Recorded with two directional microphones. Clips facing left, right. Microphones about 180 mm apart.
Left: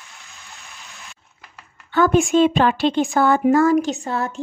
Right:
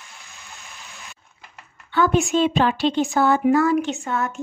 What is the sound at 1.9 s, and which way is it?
A woman's voice, 45° left (ahead or behind).